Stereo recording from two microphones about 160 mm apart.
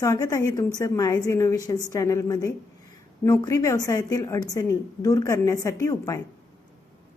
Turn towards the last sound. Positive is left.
turn(degrees=15)  # may be behind; listen again after turning